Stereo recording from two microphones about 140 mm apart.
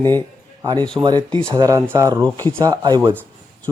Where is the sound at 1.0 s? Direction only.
30° right (ahead or behind).